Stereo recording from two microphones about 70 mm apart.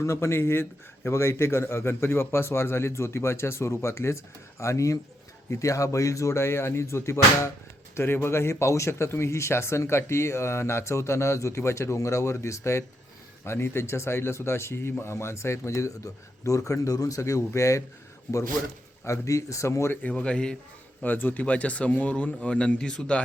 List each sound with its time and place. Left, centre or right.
0.0 s a man's voice: left
19.0 s a man's voice: left
20.0 s speech: centre
21.0 s speech: left